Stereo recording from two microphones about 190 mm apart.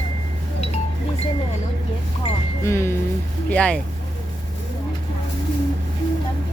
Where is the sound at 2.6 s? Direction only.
15° left (ahead or behind).